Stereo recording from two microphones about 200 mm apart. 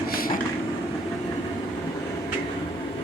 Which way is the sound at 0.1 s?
45° left (ahead or behind).